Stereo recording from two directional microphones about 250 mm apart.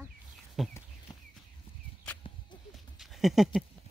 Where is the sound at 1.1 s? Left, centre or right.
Centre.